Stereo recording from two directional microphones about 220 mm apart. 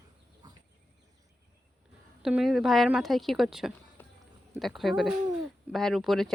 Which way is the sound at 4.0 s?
10° left (ahead or behind).